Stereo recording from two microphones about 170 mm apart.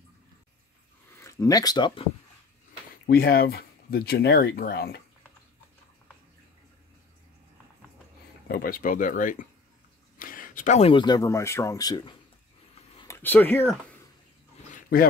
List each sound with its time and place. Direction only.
1.1 s speech: 20° left (ahead or behind)
3.1 s speech: 65° left (ahead or behind)
8.5 s speech: 65° left (ahead or behind); by 12.2 s 25° left (ahead or behind)
13.0 s speech: 15° left (ahead or behind)
14.7 s a sound: 60° left (ahead or behind)